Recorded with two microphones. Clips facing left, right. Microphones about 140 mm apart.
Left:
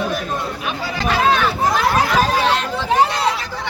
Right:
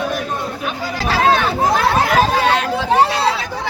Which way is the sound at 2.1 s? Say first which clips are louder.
Right 2 dB; 55° right (ahead or behind).